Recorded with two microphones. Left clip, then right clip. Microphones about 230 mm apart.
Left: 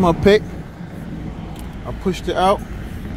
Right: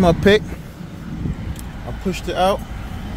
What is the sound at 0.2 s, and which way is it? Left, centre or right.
Speech, centre.